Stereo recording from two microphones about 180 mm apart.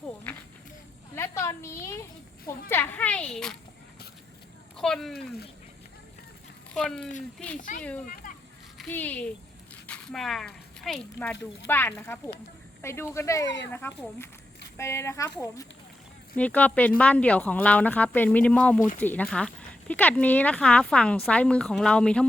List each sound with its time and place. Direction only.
1.1 s a sound: 15° left (ahead or behind)
2.5 s speech: 10° left (ahead or behind)
4.8 s a woman's voice: centre (ahead or behind)
6.7 s a woman's voice: 5° left (ahead or behind)